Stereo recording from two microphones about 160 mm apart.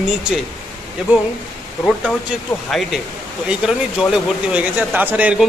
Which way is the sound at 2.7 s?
Centre (ahead or behind).